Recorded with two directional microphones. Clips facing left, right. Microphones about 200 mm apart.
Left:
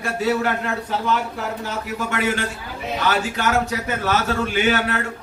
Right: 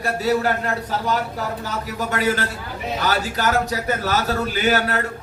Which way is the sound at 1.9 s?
40° right (ahead or behind).